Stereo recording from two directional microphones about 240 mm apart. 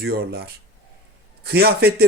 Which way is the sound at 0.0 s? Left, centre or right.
Right.